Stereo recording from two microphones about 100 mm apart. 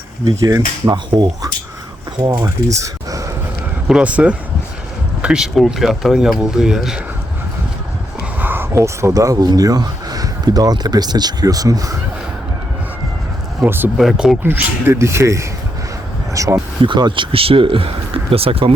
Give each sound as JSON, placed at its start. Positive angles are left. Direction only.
{"t": 0.3, "sound": "mechanisms", "side_deg": -35}
{"t": 2.6, "sound": "a sound", "side_deg": -35}
{"t": 3.8, "sound": "speech", "side_deg": -10}
{"t": 8.4, "sound": "speech", "side_deg": -20}
{"t": 13.7, "sound": "speech", "side_deg": -20}
{"t": 14.0, "sound": "speech", "side_deg": -5}
{"t": 14.4, "sound": "speech", "side_deg": -20}
{"t": 16.8, "sound": "speech", "side_deg": -55}